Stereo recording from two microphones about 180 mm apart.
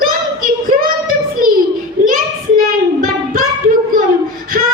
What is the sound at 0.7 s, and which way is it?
Child singing, 50° right (ahead or behind).